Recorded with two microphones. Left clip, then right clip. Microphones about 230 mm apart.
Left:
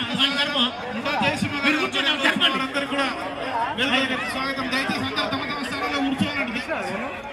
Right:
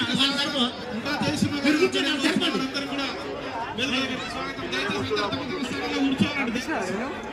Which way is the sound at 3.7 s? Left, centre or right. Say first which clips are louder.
Left 3 dB; centre.